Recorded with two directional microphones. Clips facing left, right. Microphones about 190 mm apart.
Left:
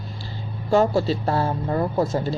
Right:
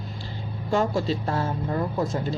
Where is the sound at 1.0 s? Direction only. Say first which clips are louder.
Left 4 dB; 35° left (ahead or behind).